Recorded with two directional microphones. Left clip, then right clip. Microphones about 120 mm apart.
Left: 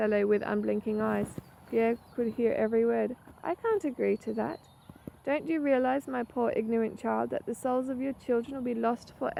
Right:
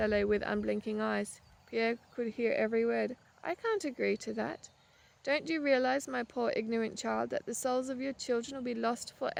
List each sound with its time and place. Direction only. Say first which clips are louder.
0.0 s speech: left 3 dB; 40° right (ahead or behind)